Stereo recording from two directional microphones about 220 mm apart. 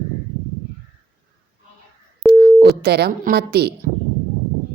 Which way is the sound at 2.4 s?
45° right (ahead or behind).